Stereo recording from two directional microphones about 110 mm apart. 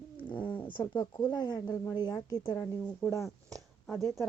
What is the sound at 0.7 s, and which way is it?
A woman's voice, 35° left (ahead or behind).